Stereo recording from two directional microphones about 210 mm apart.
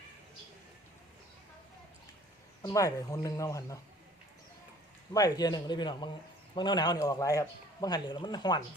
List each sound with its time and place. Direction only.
2.6 s speech: 15° left (ahead or behind)
5.1 s a man's voice: 20° left (ahead or behind)